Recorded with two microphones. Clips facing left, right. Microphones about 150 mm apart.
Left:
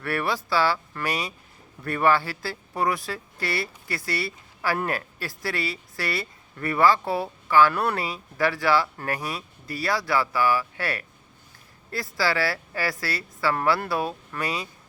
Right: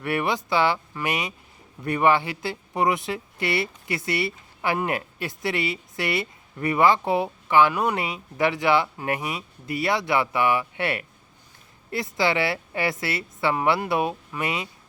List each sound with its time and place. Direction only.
0.0 s speech: 20° right (ahead or behind)